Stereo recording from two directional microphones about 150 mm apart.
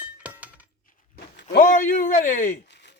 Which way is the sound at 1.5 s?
65° left (ahead or behind).